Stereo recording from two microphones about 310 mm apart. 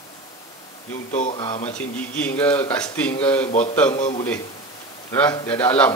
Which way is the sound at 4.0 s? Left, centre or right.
Left.